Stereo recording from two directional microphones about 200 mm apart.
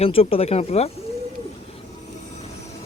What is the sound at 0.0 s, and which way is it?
Speech, 30° left (ahead or behind).